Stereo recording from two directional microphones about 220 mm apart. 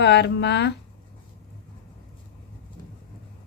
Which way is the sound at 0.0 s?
50° left (ahead or behind).